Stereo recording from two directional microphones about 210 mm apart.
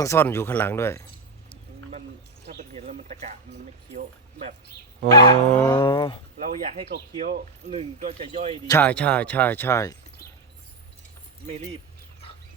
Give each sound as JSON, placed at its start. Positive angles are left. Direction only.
{"t": 0.0, "sound": "speech", "side_deg": 10}
{"t": 2.7, "sound": "a sound", "side_deg": -30}
{"t": 5.1, "sound": "speech", "side_deg": 20}
{"t": 5.5, "sound": "speech", "side_deg": 10}
{"t": 5.7, "sound": "speech", "side_deg": 20}
{"t": 6.4, "sound": "speech", "side_deg": -35}
{"t": 8.6, "sound": "speech", "side_deg": 10}